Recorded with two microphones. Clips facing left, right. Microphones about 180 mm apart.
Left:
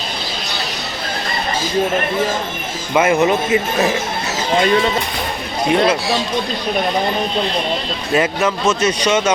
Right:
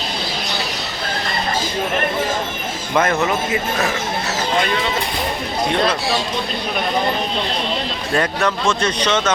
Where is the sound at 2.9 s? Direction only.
10° left (ahead or behind).